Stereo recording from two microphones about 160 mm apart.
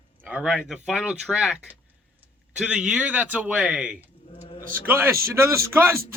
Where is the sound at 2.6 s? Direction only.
5° right (ahead or behind).